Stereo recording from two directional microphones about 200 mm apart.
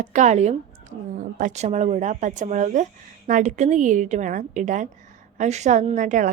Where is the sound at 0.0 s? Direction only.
40° right (ahead or behind).